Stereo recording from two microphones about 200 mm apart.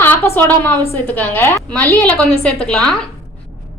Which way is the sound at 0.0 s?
10° left (ahead or behind).